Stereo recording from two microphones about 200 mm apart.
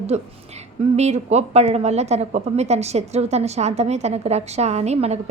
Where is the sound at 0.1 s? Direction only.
35° right (ahead or behind).